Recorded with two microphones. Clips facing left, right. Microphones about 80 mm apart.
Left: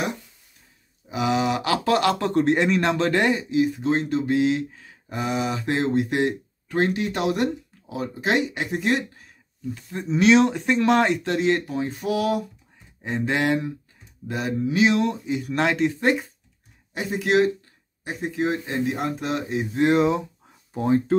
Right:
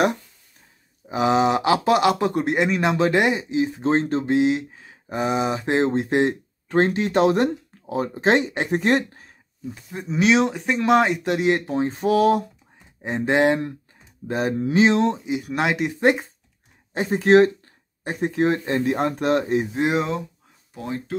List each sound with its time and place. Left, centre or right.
1.0 s speech: right
4.3 s speech: right
9.8 s speech: centre
11.6 s speech: right
13.0 s speech: right
14.2 s speech: right; by 15.9 s centre
16.0 s speech: right
20.7 s speech: left